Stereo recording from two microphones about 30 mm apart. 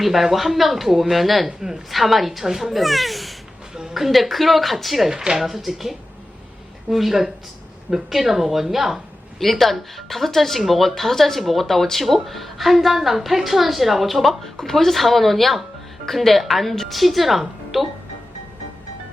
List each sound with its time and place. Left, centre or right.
0.0 s speech: centre
1.5 s speech: centre
1.9 s a woman's voice: centre
9.4 s speech: centre